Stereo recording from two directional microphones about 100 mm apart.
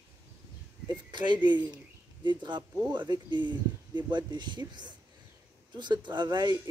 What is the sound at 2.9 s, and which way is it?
Speech, 50° right (ahead or behind).